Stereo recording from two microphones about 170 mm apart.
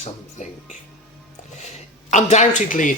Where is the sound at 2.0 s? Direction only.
45° left (ahead or behind).